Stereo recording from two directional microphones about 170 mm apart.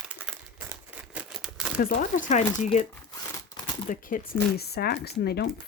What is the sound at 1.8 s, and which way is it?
Speech, 55° left (ahead or behind).